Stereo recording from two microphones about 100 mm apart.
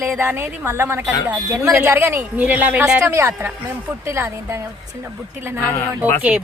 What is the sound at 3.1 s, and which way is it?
A woman's voice, 30° right (ahead or behind).